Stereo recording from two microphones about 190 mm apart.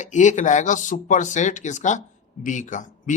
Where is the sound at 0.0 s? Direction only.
40° left (ahead or behind).